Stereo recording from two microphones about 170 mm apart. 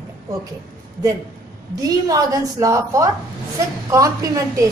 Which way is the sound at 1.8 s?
20° right (ahead or behind).